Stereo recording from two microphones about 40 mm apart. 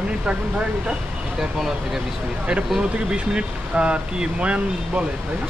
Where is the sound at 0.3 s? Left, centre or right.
Right.